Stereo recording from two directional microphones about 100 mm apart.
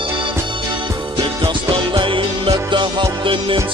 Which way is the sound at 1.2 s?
55° right (ahead or behind).